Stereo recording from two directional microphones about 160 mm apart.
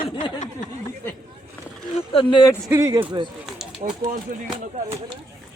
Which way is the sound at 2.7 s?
20° right (ahead or behind).